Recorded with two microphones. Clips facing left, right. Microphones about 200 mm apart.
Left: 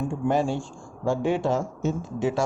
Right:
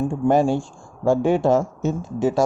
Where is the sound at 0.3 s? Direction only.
50° right (ahead or behind).